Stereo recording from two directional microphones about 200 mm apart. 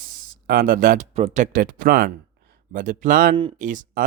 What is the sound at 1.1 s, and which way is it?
Speech, 35° right (ahead or behind).